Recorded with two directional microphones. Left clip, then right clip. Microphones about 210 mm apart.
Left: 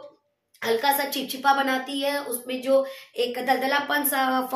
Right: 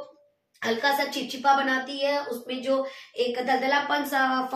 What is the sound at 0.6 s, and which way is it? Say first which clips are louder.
A woman's voice: left 2 dB; 50° left (ahead or behind).